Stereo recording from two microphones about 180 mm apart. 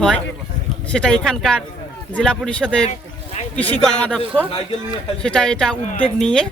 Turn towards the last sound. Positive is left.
turn(degrees=5)  # may be behind; listen again after turning